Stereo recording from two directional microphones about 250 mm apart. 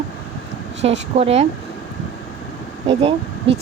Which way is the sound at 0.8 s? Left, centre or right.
Right.